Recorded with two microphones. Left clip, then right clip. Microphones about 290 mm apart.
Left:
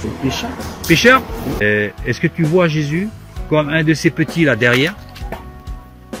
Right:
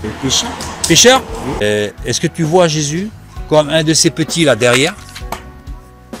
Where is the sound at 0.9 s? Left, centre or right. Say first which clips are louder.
Right 2 dB; centre.